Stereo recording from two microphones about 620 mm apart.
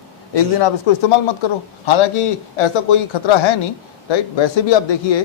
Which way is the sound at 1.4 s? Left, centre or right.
Left.